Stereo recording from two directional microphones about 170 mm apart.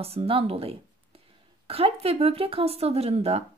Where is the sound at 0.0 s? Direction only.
35° right (ahead or behind).